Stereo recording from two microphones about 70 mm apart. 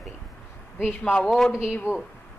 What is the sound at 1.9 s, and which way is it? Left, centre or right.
Speech, right.